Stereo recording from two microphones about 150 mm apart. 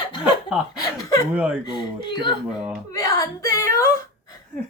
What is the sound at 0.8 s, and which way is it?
Chuckle, 25° left (ahead or behind).